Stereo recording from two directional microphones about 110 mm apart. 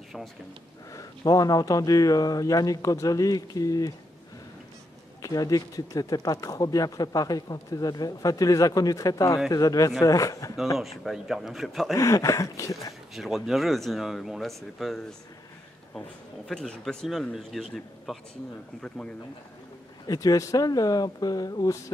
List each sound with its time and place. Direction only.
0.9 s speech: 35° left (ahead or behind)
5.2 s speech: 35° left (ahead or behind)
10.8 s speech: centre (ahead or behind)
11.9 s speech: 30° left (ahead or behind)
13.1 s speech: centre (ahead or behind)
16.4 s speech: 5° left (ahead or behind)
20.1 s speech: 35° left (ahead or behind)